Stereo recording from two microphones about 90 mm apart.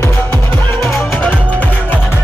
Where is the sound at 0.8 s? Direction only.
25° left (ahead or behind).